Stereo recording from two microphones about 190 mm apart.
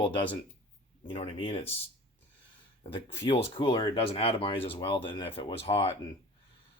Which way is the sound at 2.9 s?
30° left (ahead or behind).